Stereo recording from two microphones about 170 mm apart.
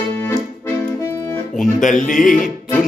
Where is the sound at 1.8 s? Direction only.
50° left (ahead or behind).